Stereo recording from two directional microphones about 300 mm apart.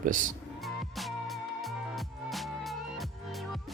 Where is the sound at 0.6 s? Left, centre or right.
Centre.